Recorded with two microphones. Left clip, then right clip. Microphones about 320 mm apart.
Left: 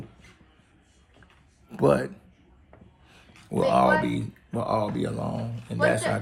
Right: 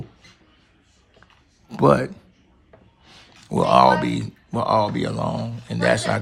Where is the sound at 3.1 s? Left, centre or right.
Right.